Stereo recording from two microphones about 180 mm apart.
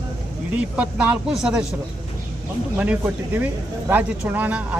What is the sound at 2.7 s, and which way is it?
Speech, 10° right (ahead or behind).